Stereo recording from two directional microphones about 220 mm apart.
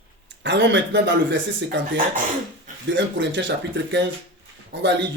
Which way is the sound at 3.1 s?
55° right (ahead or behind).